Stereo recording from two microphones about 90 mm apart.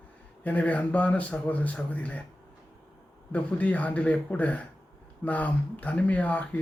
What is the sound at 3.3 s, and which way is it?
Speech, 15° left (ahead or behind).